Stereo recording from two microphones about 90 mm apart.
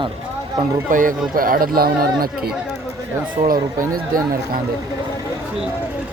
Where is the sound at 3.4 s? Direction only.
90° right.